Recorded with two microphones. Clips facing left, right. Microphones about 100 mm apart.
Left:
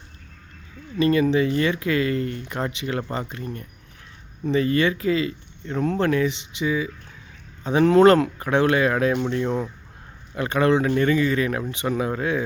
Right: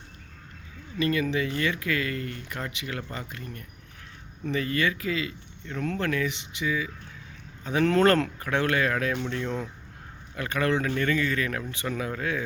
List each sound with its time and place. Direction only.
0.9 s speech: 25° left (ahead or behind)